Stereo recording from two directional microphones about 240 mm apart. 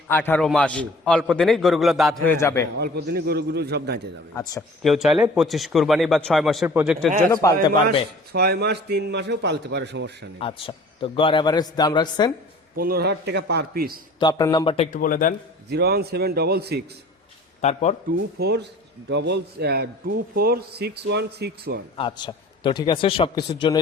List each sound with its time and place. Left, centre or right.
0.1 s a man's voice: centre
2.2 s a man's voice: centre
2.7 s a man's voice: right
4.8 s a man's voice: centre
7.4 s a man's voice: centre
8.3 s a man's voice: right
10.4 s a man's voice: left
12.7 s a man's voice: right
14.2 s a man's voice: centre
14.8 s speech: left
15.7 s a man's voice: right
17.6 s a man's voice: left
18.3 s a man's voice: right
21.9 s a man's voice: centre